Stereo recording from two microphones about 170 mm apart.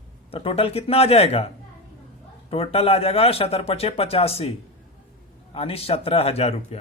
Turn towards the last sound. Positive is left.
turn(degrees=35)  # may be behind; listen again after turning